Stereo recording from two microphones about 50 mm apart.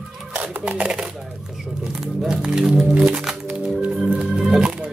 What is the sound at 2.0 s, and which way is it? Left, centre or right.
Music, centre.